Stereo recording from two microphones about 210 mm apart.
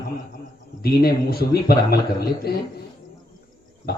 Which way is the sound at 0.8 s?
45° left (ahead or behind).